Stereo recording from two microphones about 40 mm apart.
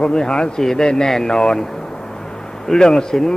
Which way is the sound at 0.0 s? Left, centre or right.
Centre.